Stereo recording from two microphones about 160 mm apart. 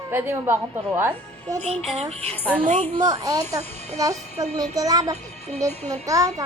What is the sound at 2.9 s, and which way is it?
Speech, 25° right (ahead or behind).